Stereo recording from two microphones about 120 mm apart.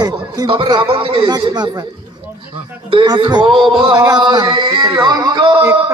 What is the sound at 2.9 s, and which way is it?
Speech, 45° right (ahead or behind).